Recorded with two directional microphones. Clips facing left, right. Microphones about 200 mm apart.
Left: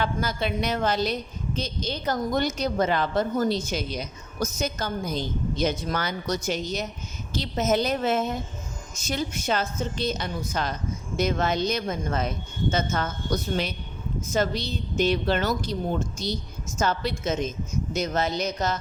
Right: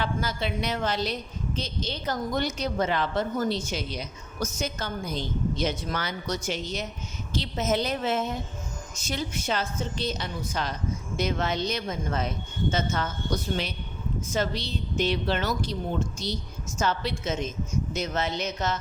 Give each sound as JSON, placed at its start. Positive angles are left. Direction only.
{"t": 0.0, "sound": "a woman's voice", "side_deg": 50}
{"t": 14.3, "sound": "a woman's voice", "side_deg": 45}